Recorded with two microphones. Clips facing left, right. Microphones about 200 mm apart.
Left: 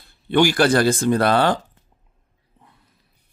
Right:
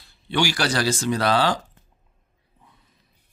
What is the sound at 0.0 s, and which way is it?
Speech, 55° left (ahead or behind).